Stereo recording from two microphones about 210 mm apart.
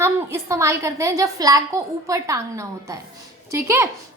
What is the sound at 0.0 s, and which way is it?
A woman's voice, 15° right (ahead or behind).